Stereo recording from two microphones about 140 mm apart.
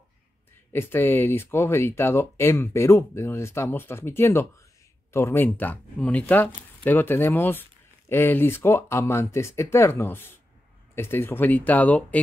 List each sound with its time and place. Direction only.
0.7 s speech: 15° left (ahead or behind)